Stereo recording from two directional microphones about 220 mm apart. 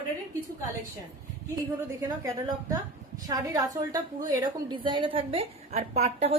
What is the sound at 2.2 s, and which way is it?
A woman's voice, 15° right (ahead or behind).